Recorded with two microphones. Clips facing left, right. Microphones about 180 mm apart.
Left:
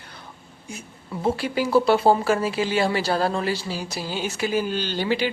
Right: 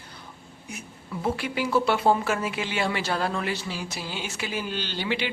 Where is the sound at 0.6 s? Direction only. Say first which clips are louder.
Left 2 dB; 30° left (ahead or behind).